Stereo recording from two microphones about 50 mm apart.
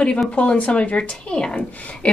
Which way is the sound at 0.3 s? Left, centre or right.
Left.